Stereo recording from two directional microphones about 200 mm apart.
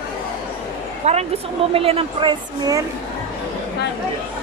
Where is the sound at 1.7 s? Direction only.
30° right (ahead or behind).